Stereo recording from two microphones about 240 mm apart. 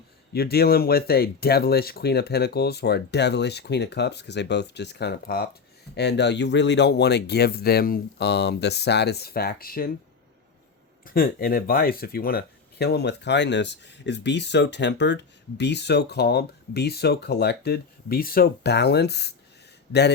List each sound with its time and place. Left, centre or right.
0.3 s speech: left
11.0 s speech: left